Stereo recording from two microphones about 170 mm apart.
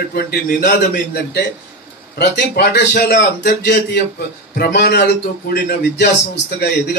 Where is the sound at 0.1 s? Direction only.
65° left (ahead or behind).